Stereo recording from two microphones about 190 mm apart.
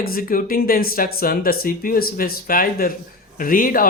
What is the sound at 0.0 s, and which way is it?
Speech, 50° left (ahead or behind).